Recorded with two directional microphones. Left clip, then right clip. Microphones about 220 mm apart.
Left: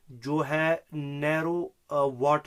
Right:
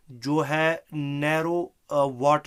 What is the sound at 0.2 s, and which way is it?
Speech, 50° right (ahead or behind).